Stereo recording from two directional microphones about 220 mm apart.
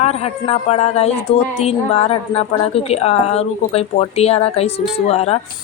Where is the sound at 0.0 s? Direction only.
30° left (ahead or behind).